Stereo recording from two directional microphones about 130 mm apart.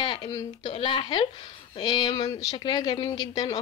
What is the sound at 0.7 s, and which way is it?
A woman's voice, 40° left (ahead or behind).